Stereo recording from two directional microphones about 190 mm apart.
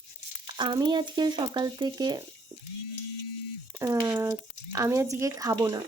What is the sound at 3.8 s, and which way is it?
Speech, 20° right (ahead or behind).